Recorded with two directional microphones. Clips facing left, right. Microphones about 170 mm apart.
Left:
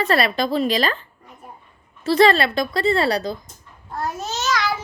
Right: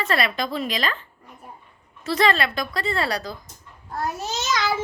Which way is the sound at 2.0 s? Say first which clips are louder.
Left 6 dB; 30° left (ahead or behind).